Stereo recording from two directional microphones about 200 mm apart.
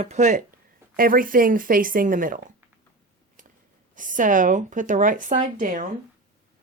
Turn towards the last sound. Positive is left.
turn(degrees=-40)  # may be behind; listen again after turning